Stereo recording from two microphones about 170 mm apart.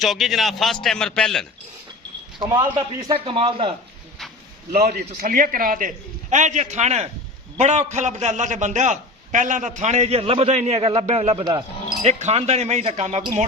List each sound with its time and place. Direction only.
0.0 s a man's voice: centre (ahead or behind)
2.4 s a man's voice: 25° right (ahead or behind)
3.2 s speech: 35° right (ahead or behind)
4.7 s a man's voice: 60° right (ahead or behind)
6.3 s a man's voice: 45° right (ahead or behind)